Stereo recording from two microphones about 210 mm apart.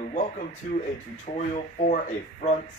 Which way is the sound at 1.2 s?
35° left (ahead or behind).